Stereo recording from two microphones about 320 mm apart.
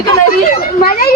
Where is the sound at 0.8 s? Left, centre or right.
Left.